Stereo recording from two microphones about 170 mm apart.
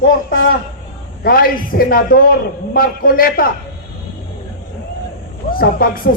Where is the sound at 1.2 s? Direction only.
60° left (ahead or behind).